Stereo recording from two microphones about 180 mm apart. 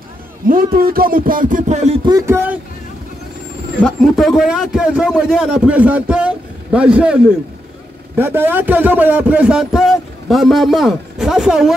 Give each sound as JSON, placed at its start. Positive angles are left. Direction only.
{"t": 0.4, "sound": "a sound", "side_deg": -50}
{"t": 2.0, "sound": "speech", "side_deg": -15}
{"t": 3.8, "sound": "a man's voice", "side_deg": 0}
{"t": 8.2, "sound": "a man's voice", "side_deg": -10}